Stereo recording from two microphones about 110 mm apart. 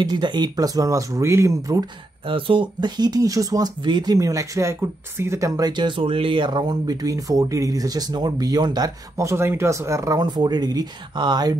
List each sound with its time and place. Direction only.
0.0 s speech: 40° right (ahead or behind)
2.2 s speech: 50° right (ahead or behind); by 5.7 s 25° right (ahead or behind)
5.7 s speech: 45° right (ahead or behind)